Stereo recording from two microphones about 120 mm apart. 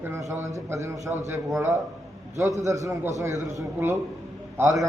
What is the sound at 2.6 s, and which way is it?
A man's voice, 25° right (ahead or behind).